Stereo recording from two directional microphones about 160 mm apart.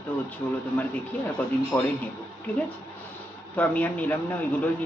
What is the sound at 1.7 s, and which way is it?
Speech, 20° left (ahead or behind).